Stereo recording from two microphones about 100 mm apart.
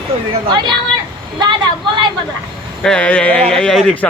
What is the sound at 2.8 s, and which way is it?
Speech, 10° left (ahead or behind).